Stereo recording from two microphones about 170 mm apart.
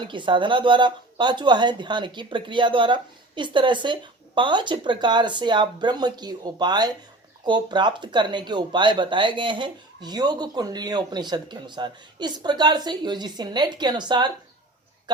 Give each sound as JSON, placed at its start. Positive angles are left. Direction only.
{"t": 0.0, "sound": "speech", "side_deg": -30}